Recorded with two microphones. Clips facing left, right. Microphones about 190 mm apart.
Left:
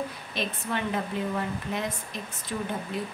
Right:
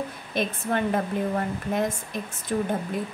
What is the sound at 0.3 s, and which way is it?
A woman's voice, 50° right (ahead or behind).